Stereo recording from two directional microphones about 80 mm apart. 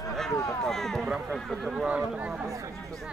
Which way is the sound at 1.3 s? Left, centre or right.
Centre.